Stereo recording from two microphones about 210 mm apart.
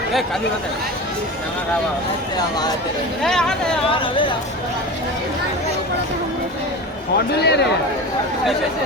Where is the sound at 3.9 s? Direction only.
25° left (ahead or behind).